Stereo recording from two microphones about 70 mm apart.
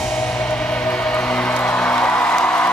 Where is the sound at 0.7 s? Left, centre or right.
Centre.